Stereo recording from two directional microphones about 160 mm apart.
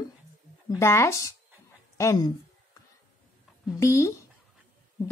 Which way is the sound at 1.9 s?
20° left (ahead or behind).